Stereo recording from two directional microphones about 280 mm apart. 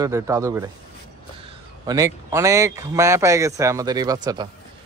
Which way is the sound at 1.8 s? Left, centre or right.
Centre.